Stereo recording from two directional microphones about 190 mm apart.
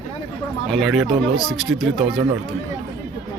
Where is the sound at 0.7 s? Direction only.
Centre (ahead or behind).